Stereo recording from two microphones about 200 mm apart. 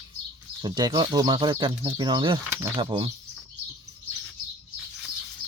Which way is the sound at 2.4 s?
10° right (ahead or behind).